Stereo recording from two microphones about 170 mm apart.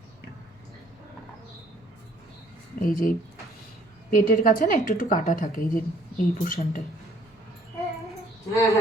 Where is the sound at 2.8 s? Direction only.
55° left (ahead or behind).